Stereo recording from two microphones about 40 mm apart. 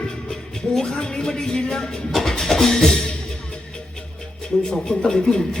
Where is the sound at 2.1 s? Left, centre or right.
Centre.